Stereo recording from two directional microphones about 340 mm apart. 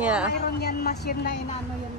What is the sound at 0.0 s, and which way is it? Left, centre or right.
Speech, centre.